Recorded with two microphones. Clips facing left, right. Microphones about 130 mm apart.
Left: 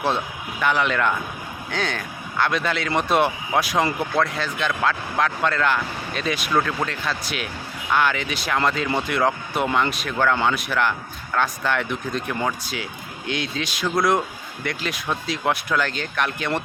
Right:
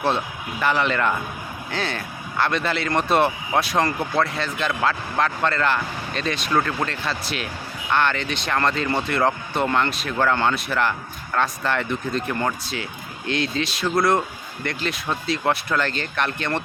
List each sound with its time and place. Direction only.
0.6 s speech: centre (ahead or behind)